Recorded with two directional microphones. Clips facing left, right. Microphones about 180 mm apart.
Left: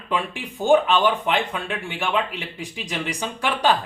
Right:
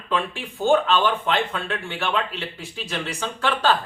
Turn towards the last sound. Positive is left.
turn(degrees=15)  # may be behind; listen again after turning